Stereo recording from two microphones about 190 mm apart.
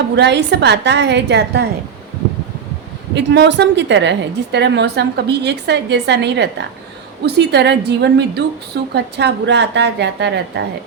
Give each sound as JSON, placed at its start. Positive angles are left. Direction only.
{"t": 0.2, "sound": "a woman's voice", "side_deg": -65}
{"t": 3.2, "sound": "a woman's voice", "side_deg": -65}